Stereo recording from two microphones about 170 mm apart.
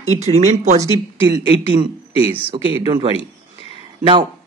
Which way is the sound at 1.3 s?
25° right (ahead or behind).